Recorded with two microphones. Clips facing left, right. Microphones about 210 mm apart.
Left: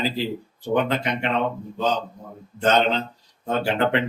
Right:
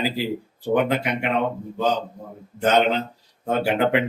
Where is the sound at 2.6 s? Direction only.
10° right (ahead or behind).